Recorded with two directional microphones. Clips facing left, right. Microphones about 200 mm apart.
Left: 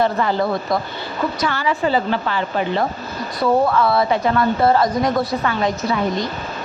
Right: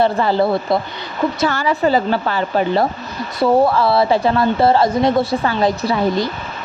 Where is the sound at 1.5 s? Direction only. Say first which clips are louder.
Right 3 dB; 40° right (ahead or behind).